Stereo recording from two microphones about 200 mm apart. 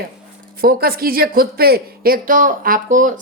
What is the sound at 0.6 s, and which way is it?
Speech, 50° right (ahead or behind).